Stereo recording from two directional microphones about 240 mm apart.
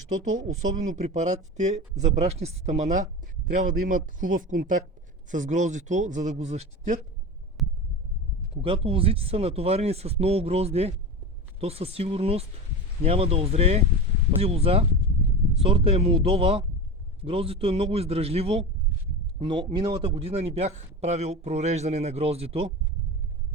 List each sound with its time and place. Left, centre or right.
1.1 s speech: right
7.6 s heart sounds: centre
8.6 s speech: right